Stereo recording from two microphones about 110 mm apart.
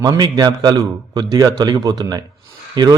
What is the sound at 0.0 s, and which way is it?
A man's voice, 35° right (ahead or behind).